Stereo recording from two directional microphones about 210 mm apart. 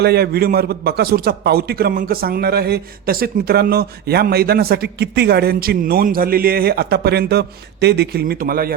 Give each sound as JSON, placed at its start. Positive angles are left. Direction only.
{"t": 0.0, "sound": "a man's voice", "side_deg": -50}